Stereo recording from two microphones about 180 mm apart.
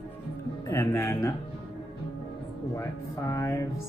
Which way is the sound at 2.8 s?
15° left (ahead or behind).